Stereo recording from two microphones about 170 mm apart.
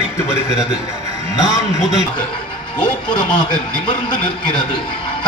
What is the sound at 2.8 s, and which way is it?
Speech, 25° left (ahead or behind).